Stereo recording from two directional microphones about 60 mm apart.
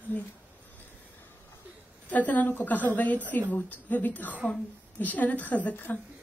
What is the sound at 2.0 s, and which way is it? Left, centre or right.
Speech, left.